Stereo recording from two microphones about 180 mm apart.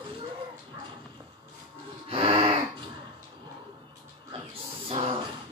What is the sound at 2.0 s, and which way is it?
Gasp, 30° right (ahead or behind).